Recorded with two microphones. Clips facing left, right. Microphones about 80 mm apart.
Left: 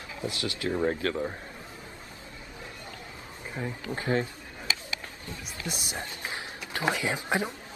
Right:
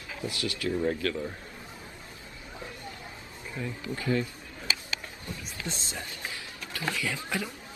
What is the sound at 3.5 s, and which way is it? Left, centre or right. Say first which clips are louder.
Speech: left 1 dB; left.